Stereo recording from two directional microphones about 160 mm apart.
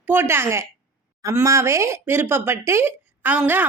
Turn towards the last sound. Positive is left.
turn(degrees=-10)  # may be behind; listen again after turning